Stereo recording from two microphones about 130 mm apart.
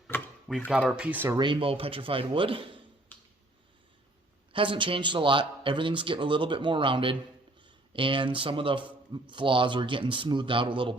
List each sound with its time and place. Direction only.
0.1 s a sound: 15° left (ahead or behind)
0.7 s speech: 5° right (ahead or behind)
1.4 s speech: 40° right (ahead or behind)
3.1 s finger snapping: 15° left (ahead or behind)
4.5 s speech: 40° right (ahead or behind)